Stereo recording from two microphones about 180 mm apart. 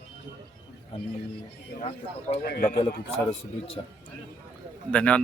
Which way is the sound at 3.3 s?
35° left (ahead or behind).